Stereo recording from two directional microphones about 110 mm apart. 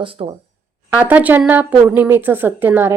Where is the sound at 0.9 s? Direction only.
15° right (ahead or behind).